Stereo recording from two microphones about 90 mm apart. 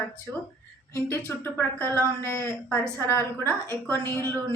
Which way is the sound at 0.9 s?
30° left (ahead or behind).